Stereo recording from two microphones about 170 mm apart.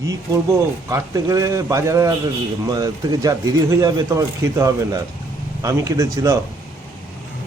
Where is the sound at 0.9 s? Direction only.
20° right (ahead or behind).